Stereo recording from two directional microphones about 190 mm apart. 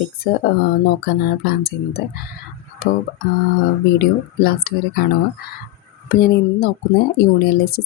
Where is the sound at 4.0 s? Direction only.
50° left (ahead or behind).